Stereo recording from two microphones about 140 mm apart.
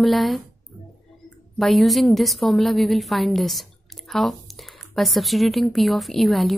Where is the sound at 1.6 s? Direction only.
Centre (ahead or behind).